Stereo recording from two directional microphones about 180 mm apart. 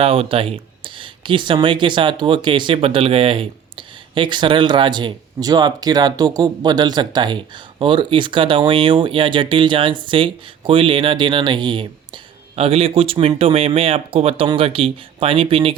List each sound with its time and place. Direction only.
0.0 s speech: 30° right (ahead or behind)